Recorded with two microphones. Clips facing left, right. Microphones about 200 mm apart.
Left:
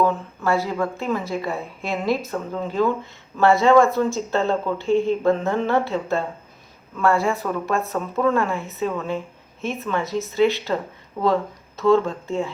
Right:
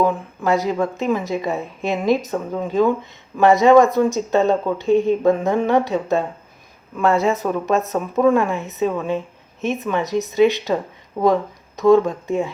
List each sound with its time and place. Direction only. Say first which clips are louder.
0.0 s a woman's voice: right 2 dB; 15° right (ahead or behind)